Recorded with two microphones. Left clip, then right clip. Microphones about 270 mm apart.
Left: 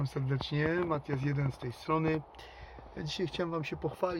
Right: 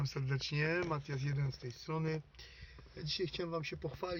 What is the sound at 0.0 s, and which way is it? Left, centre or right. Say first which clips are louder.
Speech: left 4 dB; centre.